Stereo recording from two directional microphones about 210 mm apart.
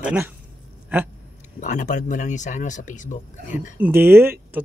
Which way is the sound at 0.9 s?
10° right (ahead or behind).